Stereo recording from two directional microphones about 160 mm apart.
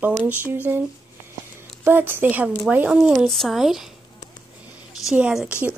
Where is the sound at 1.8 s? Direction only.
15° right (ahead or behind).